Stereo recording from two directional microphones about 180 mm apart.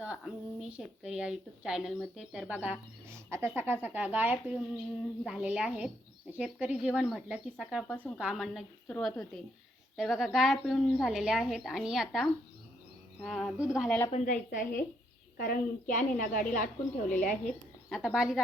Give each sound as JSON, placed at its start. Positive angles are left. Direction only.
{"t": 0.0, "sound": "a woman's voice", "side_deg": -5}
{"t": 7.9, "sound": "a woman's voice", "side_deg": 10}
{"t": 14.1, "sound": "a woman's voice", "side_deg": 45}
{"t": 18.0, "sound": "a woman's voice", "side_deg": -5}